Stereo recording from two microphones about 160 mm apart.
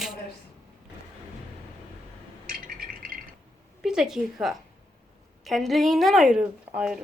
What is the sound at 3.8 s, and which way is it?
A woman's voice, 5° right (ahead or behind).